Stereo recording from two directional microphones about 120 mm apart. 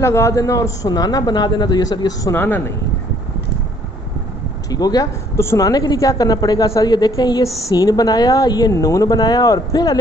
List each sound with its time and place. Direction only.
0.0 s a woman's voice: 25° left (ahead or behind)
2.3 s speech: 15° left (ahead or behind)
4.6 s a woman's voice: 35° left (ahead or behind)